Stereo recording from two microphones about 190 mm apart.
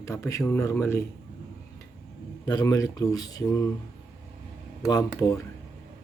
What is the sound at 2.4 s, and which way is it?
Speech, 20° left (ahead or behind).